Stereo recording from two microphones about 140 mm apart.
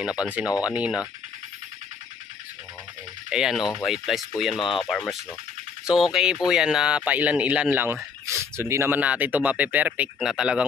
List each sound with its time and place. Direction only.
0.2 s speech: 10° right (ahead or behind)
3.3 s speech: 5° right (ahead or behind)